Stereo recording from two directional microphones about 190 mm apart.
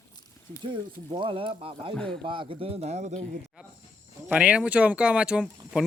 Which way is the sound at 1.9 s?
5° left (ahead or behind).